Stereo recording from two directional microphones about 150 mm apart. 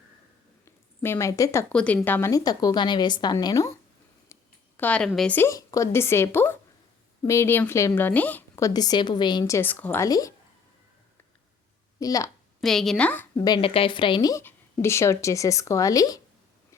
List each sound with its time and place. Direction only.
0.6 s a sound: 15° left (ahead or behind)
1.7 s a woman's voice: 10° left (ahead or behind)
2.3 s a woman's voice: 25° left (ahead or behind)
4.8 s a woman's voice: 10° left (ahead or behind)
5.3 s a woman's voice: 15° left (ahead or behind)
9.6 s a woman's voice: 15° left (ahead or behind)
11.9 s a woman's voice: 25° left (ahead or behind)
12.5 s a woman's voice: centre (ahead or behind)
13.3 s a woman's voice: 30° left (ahead or behind)